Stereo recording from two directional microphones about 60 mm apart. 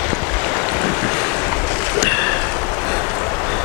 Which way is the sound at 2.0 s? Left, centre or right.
Left.